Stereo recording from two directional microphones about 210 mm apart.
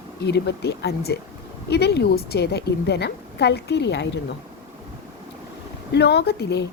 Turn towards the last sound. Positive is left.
turn(degrees=50)  # may be behind; listen again after turning